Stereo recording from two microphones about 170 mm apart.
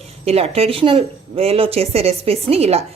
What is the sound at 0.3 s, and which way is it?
Speech, 35° right (ahead or behind).